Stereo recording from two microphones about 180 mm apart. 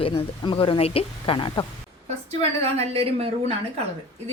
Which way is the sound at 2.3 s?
35° right (ahead or behind).